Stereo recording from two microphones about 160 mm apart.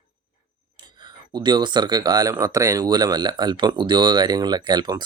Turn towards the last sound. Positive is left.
turn(degrees=-25)  # may be behind; listen again after turning